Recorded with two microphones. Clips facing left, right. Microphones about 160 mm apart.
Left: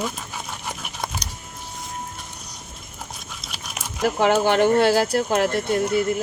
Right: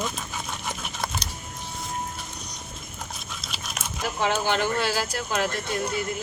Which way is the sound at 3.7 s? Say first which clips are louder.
Left 8 dB; 65° left (ahead or behind).